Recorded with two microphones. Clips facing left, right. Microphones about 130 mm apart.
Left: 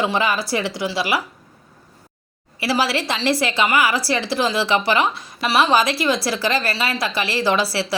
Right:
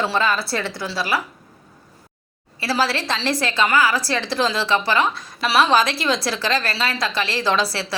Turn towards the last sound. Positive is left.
turn(degrees=10)  # may be behind; listen again after turning